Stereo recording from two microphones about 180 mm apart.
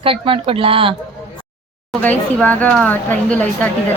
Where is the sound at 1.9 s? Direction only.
5° left (ahead or behind).